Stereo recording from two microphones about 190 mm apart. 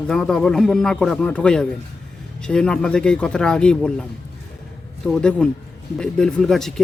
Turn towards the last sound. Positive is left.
turn(degrees=0)  # may be behind; listen again after turning